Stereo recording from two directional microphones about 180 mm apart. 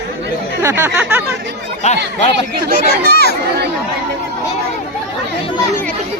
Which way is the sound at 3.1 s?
60° left (ahead or behind).